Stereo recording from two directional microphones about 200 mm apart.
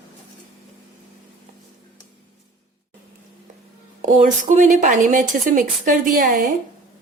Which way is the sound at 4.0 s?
40° right (ahead or behind).